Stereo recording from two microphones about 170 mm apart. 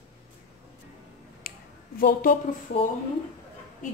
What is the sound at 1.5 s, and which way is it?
Finger snapping, 60° left (ahead or behind).